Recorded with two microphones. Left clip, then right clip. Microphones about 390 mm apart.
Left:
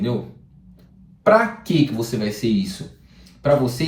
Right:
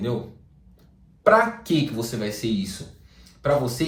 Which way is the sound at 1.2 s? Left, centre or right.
Centre.